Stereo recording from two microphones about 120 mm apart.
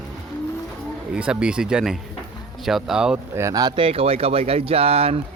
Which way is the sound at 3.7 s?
50° right (ahead or behind).